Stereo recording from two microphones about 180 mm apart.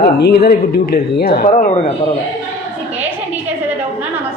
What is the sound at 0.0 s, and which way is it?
Speech, 60° left (ahead or behind).